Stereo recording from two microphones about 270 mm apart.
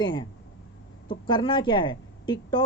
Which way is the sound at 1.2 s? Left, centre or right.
Centre.